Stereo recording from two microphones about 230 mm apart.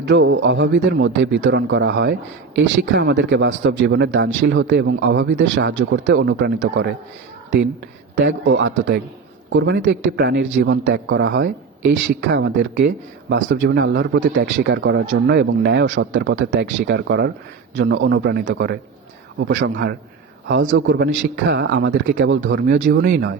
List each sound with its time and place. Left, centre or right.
0.1 s speech: right
8.2 s speech: right
20.7 s speech: right